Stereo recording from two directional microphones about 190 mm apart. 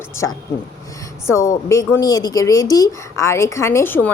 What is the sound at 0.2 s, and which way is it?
A woman's voice, 15° left (ahead or behind).